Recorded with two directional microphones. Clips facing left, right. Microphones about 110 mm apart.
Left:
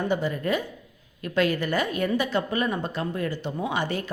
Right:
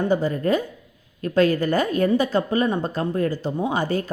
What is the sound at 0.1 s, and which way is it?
Speech, 40° right (ahead or behind).